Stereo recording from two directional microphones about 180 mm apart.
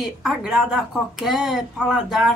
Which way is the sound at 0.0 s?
Centre (ahead or behind).